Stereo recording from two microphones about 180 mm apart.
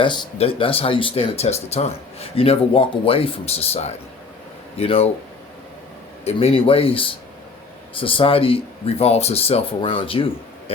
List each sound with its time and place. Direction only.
0.0 s speech: 25° left (ahead or behind)
6.2 s speech: 30° left (ahead or behind)